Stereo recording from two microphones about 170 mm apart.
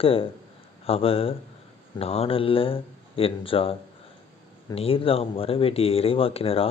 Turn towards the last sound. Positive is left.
turn(degrees=35)  # may be behind; listen again after turning